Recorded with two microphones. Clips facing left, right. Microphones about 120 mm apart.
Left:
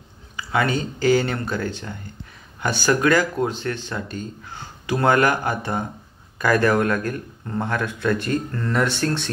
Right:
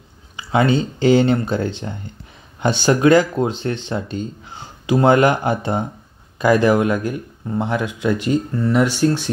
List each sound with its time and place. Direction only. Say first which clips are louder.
0.4 s speech: right 5 dB; 25° right (ahead or behind)